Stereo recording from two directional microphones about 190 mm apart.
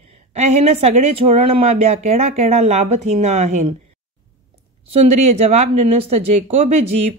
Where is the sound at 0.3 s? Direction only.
35° right (ahead or behind).